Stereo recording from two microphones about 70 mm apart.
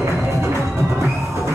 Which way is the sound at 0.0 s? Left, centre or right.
Right.